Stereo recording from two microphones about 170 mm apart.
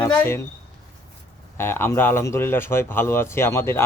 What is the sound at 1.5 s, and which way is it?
A man's voice, 15° left (ahead or behind).